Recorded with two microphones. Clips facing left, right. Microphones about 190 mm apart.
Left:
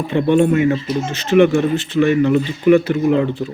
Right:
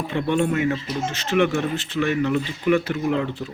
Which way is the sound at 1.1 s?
Centre (ahead or behind).